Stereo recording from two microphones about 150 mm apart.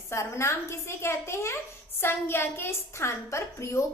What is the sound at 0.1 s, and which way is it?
A woman's voice, 20° left (ahead or behind).